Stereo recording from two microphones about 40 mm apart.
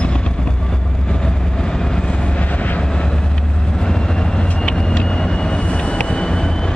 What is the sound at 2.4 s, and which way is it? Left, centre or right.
Vehicle, left.